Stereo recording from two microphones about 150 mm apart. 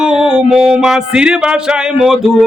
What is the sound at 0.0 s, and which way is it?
Speech, 5° right (ahead or behind).